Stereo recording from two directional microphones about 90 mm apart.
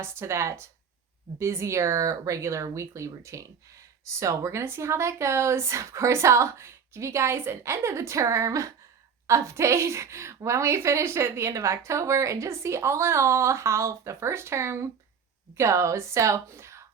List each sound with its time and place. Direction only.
0.0 s a woman's voice: 30° right (ahead or behind)